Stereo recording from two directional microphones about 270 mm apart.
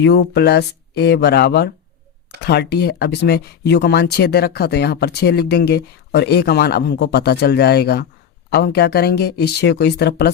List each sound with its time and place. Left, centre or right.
0.0 s speech: left